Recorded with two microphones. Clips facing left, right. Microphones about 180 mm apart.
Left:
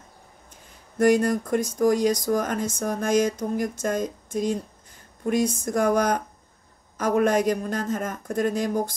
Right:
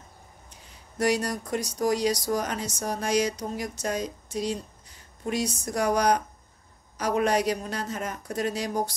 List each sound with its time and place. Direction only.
0.9 s speech: 50° left (ahead or behind)